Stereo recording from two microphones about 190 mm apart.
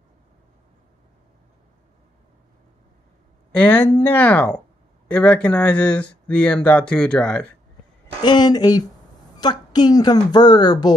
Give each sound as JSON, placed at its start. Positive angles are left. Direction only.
{"t": 3.5, "sound": "speech", "side_deg": 10}
{"t": 8.2, "sound": "a woman's voice", "side_deg": 25}